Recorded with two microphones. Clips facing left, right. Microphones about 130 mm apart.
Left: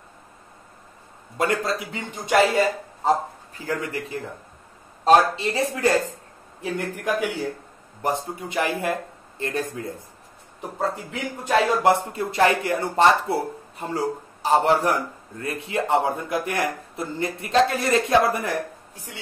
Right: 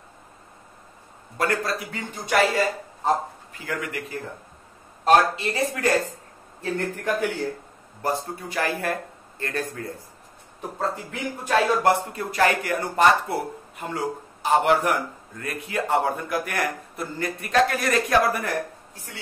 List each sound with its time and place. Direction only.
1.4 s speech: 20° left (ahead or behind)
3.5 s a man's voice: 30° left (ahead or behind)
5.3 s speech: 25° left (ahead or behind)